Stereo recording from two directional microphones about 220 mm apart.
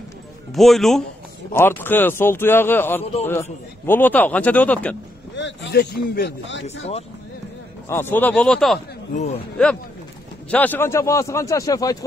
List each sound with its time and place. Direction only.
0.5 s a man's voice: centre (ahead or behind)
5.3 s speech: 55° left (ahead or behind)
7.9 s a man's voice: 10° left (ahead or behind)
9.1 s a man's voice: 30° left (ahead or behind)
9.6 s a man's voice: 5° left (ahead or behind)